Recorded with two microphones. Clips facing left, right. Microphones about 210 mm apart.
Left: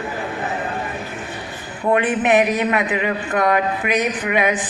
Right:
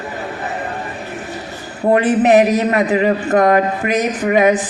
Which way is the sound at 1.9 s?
40° right (ahead or behind).